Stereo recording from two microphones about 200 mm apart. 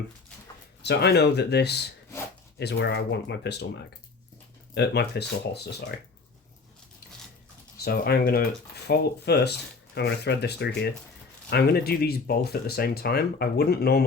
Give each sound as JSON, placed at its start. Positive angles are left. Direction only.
{"t": 0.8, "sound": "speech", "side_deg": 55}
{"t": 7.8, "sound": "speech", "side_deg": 50}